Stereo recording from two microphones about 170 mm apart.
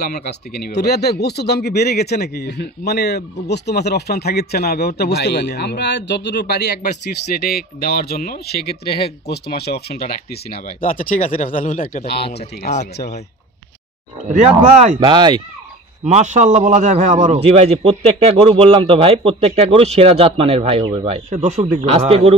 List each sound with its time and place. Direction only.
0.0 s speech: 65° left (ahead or behind)
10.5 s speech: 55° left (ahead or behind)
14.3 s speech: 45° right (ahead or behind)
15.0 s speech: 25° right (ahead or behind)
16.0 s a man's voice: 40° right (ahead or behind)
21.3 s a man's voice: 45° right (ahead or behind)